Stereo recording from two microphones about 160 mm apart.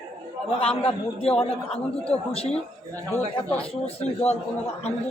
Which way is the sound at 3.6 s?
40° left (ahead or behind).